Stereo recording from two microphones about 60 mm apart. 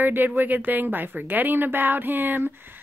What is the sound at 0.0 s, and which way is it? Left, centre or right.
Speech, right.